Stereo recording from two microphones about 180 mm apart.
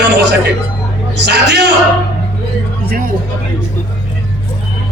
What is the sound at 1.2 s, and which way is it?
Speech, 70° right (ahead or behind).